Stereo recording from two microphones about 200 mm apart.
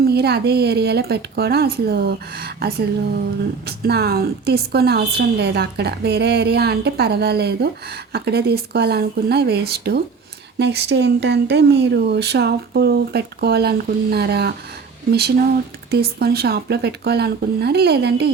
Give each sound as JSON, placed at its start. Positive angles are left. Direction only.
{"t": 0.0, "sound": "a woman's voice", "side_deg": -55}
{"t": 15.9, "sound": "a woman's voice", "side_deg": -50}